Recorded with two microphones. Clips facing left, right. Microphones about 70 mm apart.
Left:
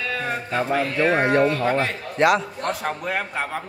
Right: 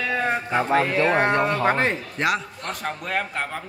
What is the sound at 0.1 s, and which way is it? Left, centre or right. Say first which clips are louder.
Music: right 4 dB; centre.